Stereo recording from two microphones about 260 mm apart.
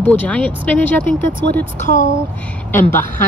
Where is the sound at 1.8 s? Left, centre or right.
Left.